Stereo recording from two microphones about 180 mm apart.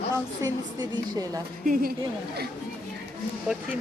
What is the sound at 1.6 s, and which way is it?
Speech, 50° right (ahead or behind).